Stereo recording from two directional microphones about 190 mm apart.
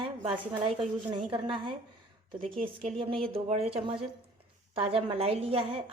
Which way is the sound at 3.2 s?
30° right (ahead or behind).